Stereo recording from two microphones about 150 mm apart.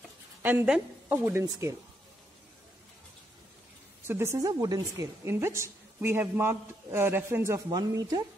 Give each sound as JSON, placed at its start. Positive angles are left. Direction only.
{"t": 0.4, "sound": "a woman's voice", "side_deg": -10}
{"t": 4.1, "sound": "a woman's voice", "side_deg": -15}